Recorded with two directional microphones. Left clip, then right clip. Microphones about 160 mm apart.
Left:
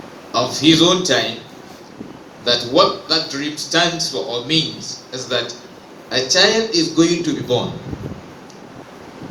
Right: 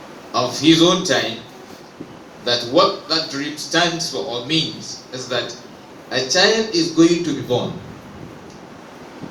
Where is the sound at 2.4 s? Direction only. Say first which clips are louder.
Left 1 dB; 55° left (ahead or behind).